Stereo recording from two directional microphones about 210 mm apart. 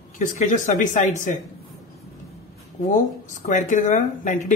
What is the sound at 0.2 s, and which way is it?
Speech, 35° left (ahead or behind).